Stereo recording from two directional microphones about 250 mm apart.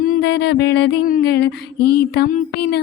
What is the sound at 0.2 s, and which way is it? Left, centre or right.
Mantra, left.